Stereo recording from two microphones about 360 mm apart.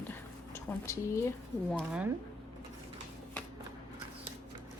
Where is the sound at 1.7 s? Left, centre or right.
Centre.